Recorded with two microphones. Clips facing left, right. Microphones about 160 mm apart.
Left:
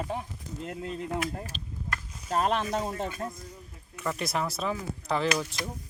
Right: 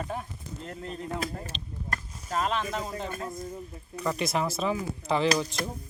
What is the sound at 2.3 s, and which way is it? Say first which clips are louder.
Speech: left 2 dB; 40° left (ahead or behind).